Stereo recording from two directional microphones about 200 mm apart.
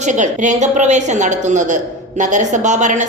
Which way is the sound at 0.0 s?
40° right (ahead or behind).